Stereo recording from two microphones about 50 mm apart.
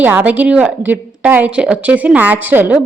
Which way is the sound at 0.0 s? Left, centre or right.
Right.